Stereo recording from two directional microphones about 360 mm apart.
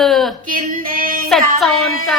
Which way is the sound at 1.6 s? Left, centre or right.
Centre.